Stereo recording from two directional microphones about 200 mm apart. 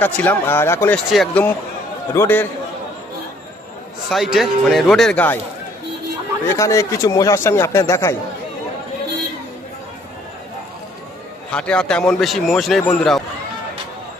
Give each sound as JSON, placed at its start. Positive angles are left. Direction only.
{"t": 0.0, "sound": "speech", "side_deg": 10}
{"t": 4.1, "sound": "speech", "side_deg": 0}
{"t": 6.4, "sound": "speech", "side_deg": 15}
{"t": 11.5, "sound": "speech", "side_deg": 5}